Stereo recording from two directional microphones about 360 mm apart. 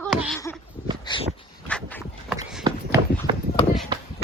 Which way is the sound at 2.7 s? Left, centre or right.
Centre.